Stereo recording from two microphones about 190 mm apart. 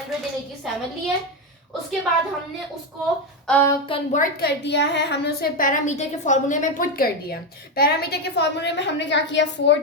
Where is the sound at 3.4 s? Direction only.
10° left (ahead or behind).